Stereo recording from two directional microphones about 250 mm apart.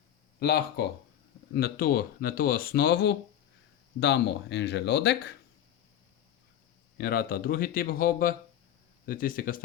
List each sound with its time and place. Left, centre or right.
0.3 s speech: left
7.0 s speech: left